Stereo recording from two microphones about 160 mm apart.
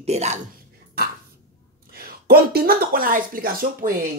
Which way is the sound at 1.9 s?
70° right (ahead or behind).